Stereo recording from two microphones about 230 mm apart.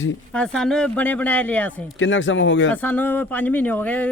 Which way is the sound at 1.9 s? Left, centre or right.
Left.